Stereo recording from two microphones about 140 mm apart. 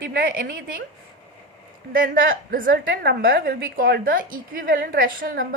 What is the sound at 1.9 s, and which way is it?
A woman's voice, 90° right.